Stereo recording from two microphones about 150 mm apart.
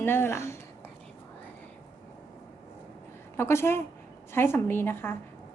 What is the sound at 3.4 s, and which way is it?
Speech, 15° left (ahead or behind).